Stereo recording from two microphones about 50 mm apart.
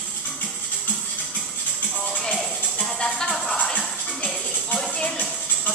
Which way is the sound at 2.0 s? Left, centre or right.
Centre.